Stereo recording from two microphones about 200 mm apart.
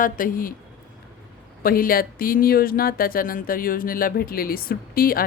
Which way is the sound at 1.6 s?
45° left (ahead or behind).